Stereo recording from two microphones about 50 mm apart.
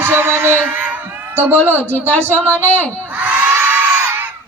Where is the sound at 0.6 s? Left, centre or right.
Right.